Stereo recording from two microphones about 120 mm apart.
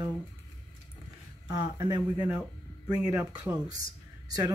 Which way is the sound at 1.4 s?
35° right (ahead or behind).